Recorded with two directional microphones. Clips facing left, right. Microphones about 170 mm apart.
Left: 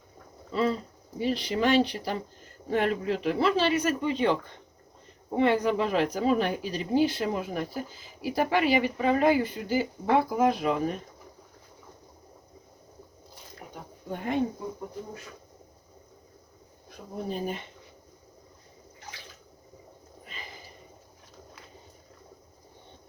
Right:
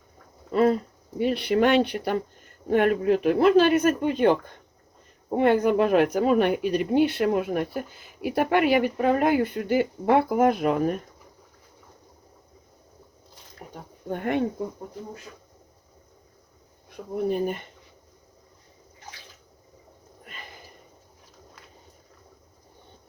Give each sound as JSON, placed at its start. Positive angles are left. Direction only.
{"t": 0.5, "sound": "speech", "side_deg": -55}
{"t": 14.1, "sound": "speech", "side_deg": -60}
{"t": 17.2, "sound": "speech", "side_deg": -55}